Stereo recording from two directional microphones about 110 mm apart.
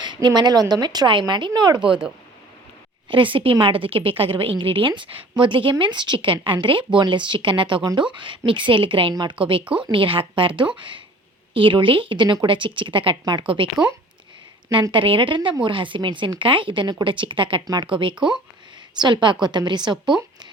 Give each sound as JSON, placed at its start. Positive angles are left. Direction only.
{"t": 0.0, "sound": "a woman's voice", "side_deg": -45}
{"t": 3.1, "sound": "a woman's voice", "side_deg": -50}
{"t": 9.6, "sound": "speech", "side_deg": -10}
{"t": 9.9, "sound": "a woman's voice", "side_deg": -55}
{"t": 14.9, "sound": "a woman's voice", "side_deg": -50}
{"t": 18.9, "sound": "a woman's voice", "side_deg": -45}